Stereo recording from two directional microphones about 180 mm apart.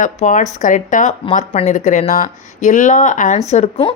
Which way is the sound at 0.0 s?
45° left (ahead or behind).